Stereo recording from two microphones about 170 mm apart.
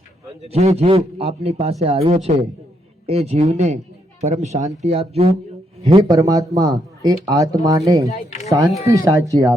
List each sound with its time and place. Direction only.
0.4 s a man's voice: 35° right (ahead or behind)
6.1 s speech: 20° right (ahead or behind)
8.1 s a sound: 40° left (ahead or behind)
8.4 s speech: 20° right (ahead or behind)